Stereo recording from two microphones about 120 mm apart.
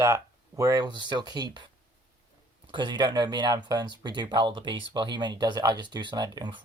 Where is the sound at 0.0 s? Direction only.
25° right (ahead or behind).